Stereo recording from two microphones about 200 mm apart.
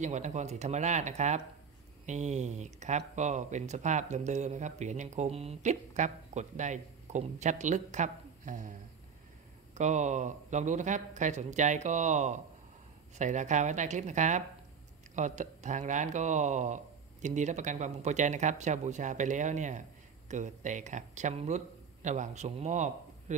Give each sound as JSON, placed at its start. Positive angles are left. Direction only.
{"t": 0.0, "sound": "speech", "side_deg": -35}
{"t": 9.8, "sound": "speech", "side_deg": -35}